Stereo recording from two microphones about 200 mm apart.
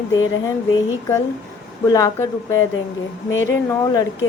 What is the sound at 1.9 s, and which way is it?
A woman's voice, 15° left (ahead or behind).